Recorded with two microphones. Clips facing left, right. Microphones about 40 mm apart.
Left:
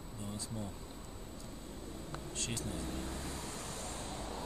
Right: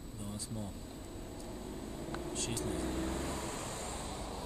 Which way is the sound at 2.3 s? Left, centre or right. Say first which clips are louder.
Right 1 dB; centre.